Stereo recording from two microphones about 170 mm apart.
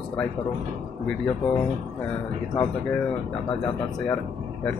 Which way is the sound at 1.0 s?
5° left (ahead or behind).